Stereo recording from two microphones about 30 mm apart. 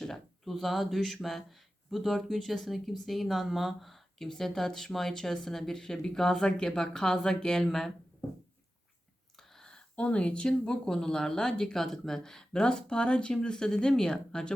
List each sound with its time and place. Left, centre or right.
0.4 s speech: centre
4.2 s speech: centre
9.4 s a sound: centre
9.9 s speech: left
10.8 s speech: centre
12.6 s speech: left